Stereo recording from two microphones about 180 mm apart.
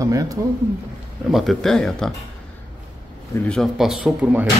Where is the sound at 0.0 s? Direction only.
20° right (ahead or behind).